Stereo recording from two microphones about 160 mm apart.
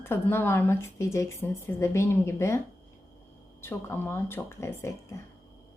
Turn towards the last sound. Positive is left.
turn(degrees=15)  # may be behind; listen again after turning